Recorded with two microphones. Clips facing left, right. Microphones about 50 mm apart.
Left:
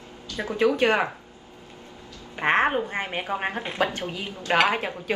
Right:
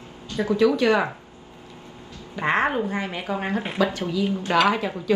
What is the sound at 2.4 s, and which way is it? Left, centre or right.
Speech, left.